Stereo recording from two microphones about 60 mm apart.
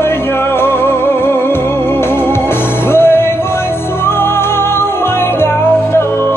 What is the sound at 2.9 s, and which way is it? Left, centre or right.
Music, left.